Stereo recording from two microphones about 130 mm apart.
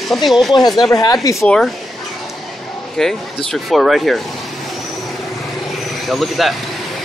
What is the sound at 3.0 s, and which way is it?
Speech, 5° left (ahead or behind).